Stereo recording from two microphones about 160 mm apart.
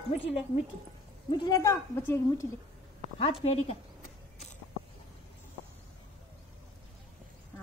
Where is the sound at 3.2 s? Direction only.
35° left (ahead or behind).